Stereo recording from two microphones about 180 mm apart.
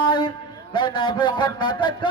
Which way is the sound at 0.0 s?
25° left (ahead or behind).